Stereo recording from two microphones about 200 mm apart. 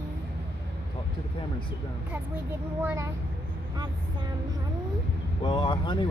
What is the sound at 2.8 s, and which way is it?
Speech, 10° right (ahead or behind).